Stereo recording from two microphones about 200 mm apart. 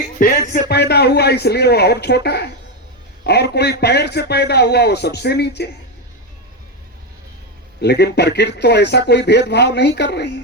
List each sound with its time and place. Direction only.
0.2 s music: 40° left (ahead or behind)
0.7 s speech: 55° left (ahead or behind)
7.8 s speech: 55° left (ahead or behind)